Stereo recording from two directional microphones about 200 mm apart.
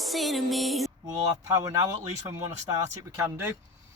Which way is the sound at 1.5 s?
15° right (ahead or behind).